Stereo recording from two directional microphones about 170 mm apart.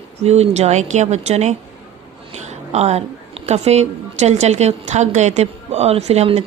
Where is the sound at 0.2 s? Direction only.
40° right (ahead or behind).